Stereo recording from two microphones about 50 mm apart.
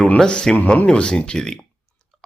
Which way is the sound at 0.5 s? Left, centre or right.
Left.